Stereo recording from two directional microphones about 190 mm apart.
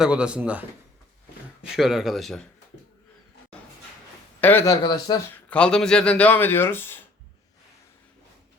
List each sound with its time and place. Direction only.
0.0 s speech: 5° right (ahead or behind)
1.7 s speech: centre (ahead or behind)
4.4 s speech: 10° left (ahead or behind)
5.5 s speech: 5° left (ahead or behind)